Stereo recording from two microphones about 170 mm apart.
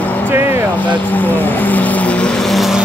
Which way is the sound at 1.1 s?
10° left (ahead or behind).